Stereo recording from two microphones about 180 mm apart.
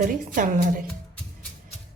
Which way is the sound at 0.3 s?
50° right (ahead or behind).